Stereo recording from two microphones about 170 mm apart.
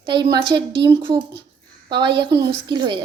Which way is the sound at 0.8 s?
25° right (ahead or behind).